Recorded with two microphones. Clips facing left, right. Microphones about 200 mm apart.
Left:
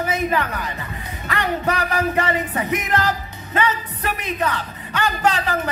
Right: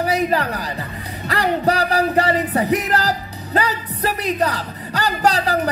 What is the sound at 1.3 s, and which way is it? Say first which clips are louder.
Music: right 4 dB; 35° right (ahead or behind).